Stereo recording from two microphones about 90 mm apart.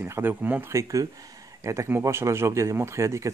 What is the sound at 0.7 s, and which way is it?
Speech, 35° right (ahead or behind).